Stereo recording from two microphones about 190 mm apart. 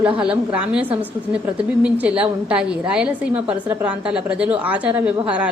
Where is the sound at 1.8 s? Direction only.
5° right (ahead or behind).